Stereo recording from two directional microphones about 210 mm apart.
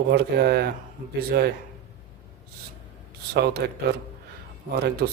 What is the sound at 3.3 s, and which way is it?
Speech, 50° right (ahead or behind).